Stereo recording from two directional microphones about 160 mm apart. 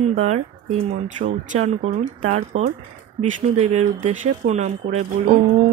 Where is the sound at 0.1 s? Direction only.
45° right (ahead or behind).